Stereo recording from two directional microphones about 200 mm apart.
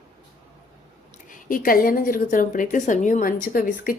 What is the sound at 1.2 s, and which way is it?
A woman's voice, 45° left (ahead or behind).